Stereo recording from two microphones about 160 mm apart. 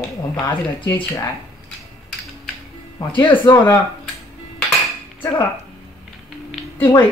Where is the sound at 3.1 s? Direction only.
30° left (ahead or behind).